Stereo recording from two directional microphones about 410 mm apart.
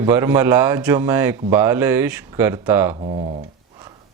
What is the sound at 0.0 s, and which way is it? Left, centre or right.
Speech, centre.